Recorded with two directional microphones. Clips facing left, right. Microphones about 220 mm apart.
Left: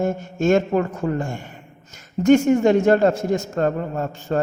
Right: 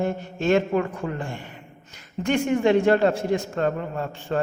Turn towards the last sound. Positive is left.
turn(degrees=40)  # may be behind; listen again after turning